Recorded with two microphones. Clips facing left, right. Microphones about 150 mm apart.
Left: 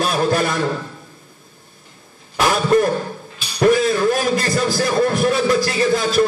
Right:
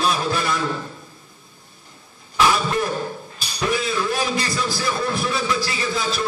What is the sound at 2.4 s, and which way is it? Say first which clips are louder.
Cough: left 4 dB; 45° left (ahead or behind).